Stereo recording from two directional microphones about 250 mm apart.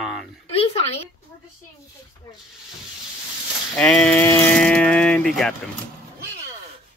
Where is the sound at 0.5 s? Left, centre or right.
Left.